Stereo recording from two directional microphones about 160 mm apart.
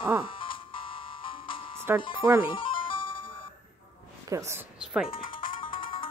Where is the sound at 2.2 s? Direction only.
10° right (ahead or behind).